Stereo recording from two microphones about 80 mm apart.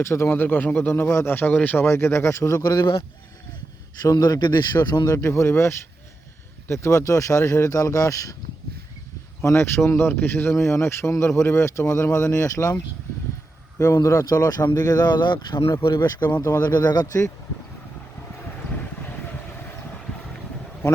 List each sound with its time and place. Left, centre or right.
0.0 s speech: left
1.0 s speech: left
1.3 s speech: left
1.9 s speech: left
2.6 s a man's voice: left
4.0 s a man's voice: left
5.1 s speech: left
9.4 s a man's voice: left
16.4 s speech: left
16.6 s a man's voice: left